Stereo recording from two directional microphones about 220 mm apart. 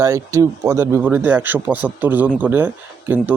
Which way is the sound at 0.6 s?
15° right (ahead or behind).